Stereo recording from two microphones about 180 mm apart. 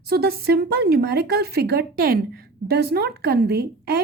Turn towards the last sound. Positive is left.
turn(degrees=-60)  # may be behind; listen again after turning